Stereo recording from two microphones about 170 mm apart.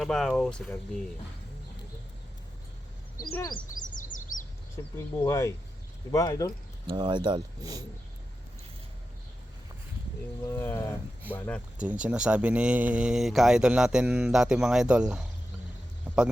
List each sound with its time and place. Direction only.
0.0 s speech: centre (ahead or behind)
3.5 s bird vocalization: 50° left (ahead or behind)
4.9 s speech: 20° left (ahead or behind)
6.8 s speech: 25° right (ahead or behind)
10.4 s speech: 15° left (ahead or behind)
11.8 s speech: 5° right (ahead or behind)